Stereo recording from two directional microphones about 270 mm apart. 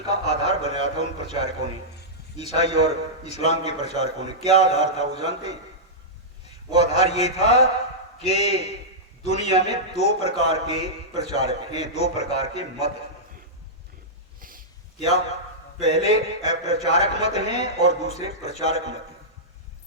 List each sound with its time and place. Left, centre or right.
0.1 s a man's voice: left
2.4 s a man's voice: left
6.7 s a man's voice: left
15.8 s a man's voice: left